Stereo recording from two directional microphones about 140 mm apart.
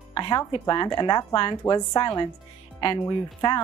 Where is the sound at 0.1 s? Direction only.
30° left (ahead or behind).